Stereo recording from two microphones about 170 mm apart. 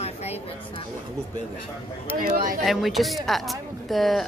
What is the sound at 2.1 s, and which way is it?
Speech, 55° right (ahead or behind).